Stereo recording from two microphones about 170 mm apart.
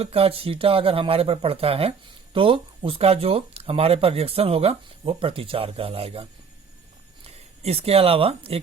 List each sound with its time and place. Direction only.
0.0 s speech: 35° right (ahead or behind)
7.3 s speech: 35° right (ahead or behind)